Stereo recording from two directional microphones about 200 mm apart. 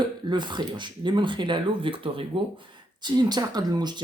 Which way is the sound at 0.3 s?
20° right (ahead or behind).